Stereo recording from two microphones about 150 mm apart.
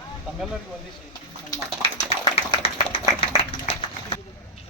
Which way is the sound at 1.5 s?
30° left (ahead or behind).